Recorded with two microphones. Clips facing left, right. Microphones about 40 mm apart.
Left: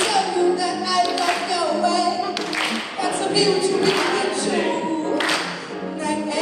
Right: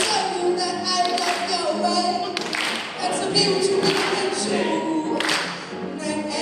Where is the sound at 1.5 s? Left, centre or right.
Left.